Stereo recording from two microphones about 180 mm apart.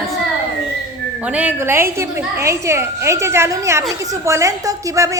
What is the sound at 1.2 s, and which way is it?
A woman's voice, 5° right (ahead or behind).